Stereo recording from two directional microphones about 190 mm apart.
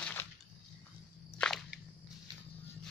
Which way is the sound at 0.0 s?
10° left (ahead or behind).